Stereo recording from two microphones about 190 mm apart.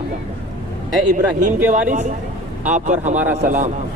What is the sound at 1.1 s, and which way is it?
A man's voice, 40° right (ahead or behind).